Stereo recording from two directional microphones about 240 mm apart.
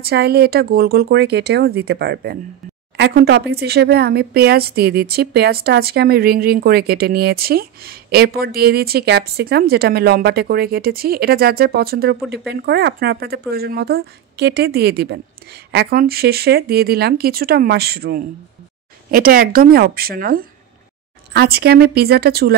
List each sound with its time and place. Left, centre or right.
0.0 s speech: right